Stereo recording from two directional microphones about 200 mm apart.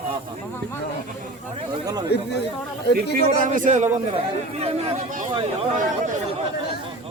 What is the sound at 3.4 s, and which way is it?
Speech, 40° right (ahead or behind).